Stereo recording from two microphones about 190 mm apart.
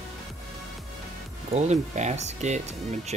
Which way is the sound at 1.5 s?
35° right (ahead or behind).